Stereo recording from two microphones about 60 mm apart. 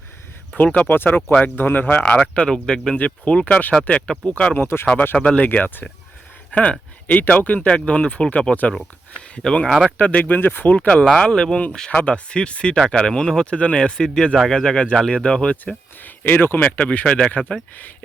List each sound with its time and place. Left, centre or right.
0.5 s speech: left
2.0 s speech: centre
4.5 s speech: left
5.1 s speech: left
5.5 s speech: left; by 9.7 s centre
10.0 s speech: left
10.8 s speech: centre
16.0 s speech: left